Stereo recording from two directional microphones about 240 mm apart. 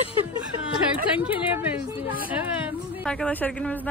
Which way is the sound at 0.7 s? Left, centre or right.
Centre.